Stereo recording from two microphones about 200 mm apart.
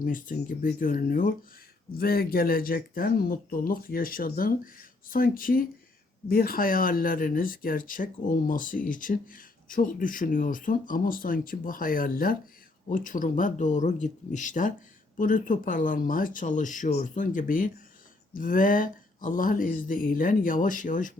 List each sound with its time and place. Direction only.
0.0 s speech: 45° left (ahead or behind)